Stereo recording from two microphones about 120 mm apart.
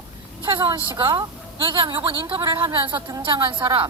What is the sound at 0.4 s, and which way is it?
A woman's voice, 40° right (ahead or behind).